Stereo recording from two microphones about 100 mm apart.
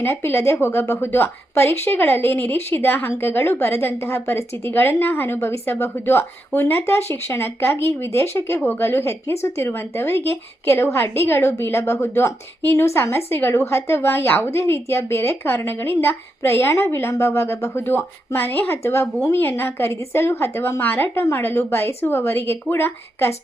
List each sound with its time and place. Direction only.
0.0 s a woman's voice: 20° left (ahead or behind)